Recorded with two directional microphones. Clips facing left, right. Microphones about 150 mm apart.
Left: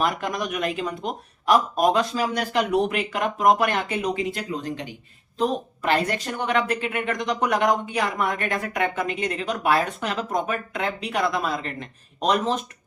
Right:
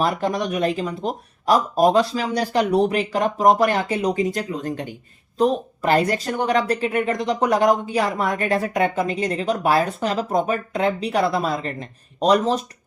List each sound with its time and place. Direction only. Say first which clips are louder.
0.0 s speech: right 4 dB; 35° right (ahead or behind)